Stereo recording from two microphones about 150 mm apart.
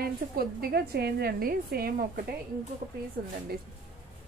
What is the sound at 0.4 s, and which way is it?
A woman's voice, 90° right.